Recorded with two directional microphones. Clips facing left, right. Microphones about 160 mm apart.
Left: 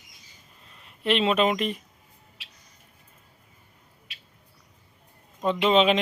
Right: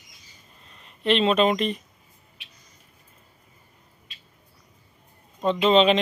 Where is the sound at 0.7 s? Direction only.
5° left (ahead or behind).